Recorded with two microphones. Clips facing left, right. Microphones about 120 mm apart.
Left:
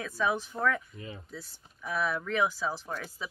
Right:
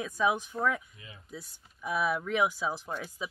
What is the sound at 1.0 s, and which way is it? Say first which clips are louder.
Speech: left 10 dB; 40° left (ahead or behind).